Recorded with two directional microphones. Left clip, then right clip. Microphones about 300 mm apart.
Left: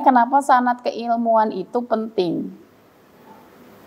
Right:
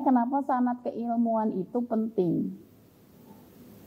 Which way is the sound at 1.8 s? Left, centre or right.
Centre.